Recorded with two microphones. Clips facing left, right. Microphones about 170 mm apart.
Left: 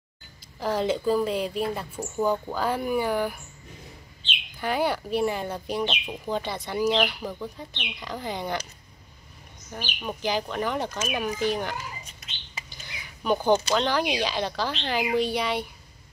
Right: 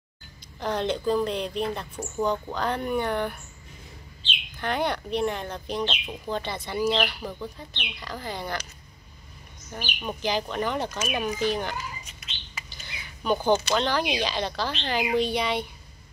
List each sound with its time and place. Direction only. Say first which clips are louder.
0.6 s speech: left 2 dB; 5° left (ahead or behind)
4.6 s speech: left 2 dB; 5° left (ahead or behind)
9.7 s speech: even; 5° left (ahead or behind)
12.6 s a sound: even; 10° left (ahead or behind)
13.8 s speech: left 1 dB; 10° left (ahead or behind)